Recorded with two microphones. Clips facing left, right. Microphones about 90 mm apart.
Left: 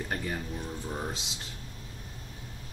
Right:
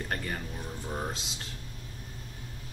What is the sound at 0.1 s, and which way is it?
Speech, 5° left (ahead or behind).